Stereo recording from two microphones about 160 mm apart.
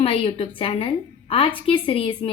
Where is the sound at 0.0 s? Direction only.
35° left (ahead or behind).